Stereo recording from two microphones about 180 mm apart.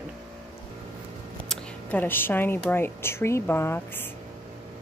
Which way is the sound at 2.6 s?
10° left (ahead or behind).